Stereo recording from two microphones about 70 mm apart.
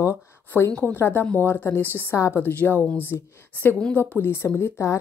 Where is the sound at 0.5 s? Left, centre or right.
Left.